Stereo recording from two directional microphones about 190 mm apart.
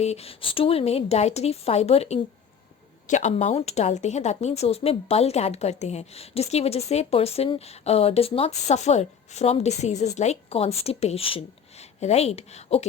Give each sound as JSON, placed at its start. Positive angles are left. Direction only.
{"t": 0.0, "sound": "speech", "side_deg": 35}